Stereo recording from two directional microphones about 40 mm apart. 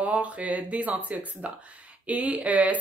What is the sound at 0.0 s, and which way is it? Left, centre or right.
A woman's voice, right.